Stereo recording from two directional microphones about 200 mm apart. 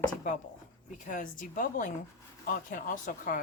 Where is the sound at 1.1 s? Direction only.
45° left (ahead or behind).